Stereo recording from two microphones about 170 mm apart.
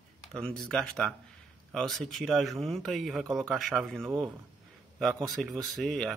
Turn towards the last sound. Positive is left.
turn(degrees=0)  # may be behind; listen again after turning